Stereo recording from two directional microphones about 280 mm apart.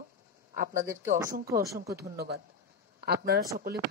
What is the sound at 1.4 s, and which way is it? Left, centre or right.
Speech, centre.